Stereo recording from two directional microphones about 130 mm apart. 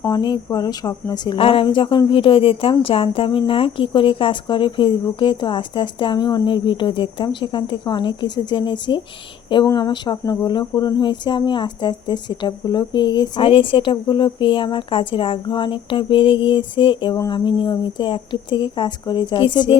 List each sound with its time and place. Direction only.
0.1 s speech: 35° left (ahead or behind)
1.4 s speech: 45° left (ahead or behind)